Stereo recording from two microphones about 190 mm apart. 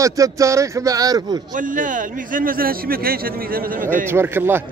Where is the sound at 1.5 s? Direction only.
45° right (ahead or behind).